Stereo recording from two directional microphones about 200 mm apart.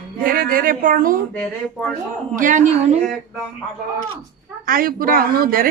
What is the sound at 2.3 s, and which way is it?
Speech, 40° right (ahead or behind).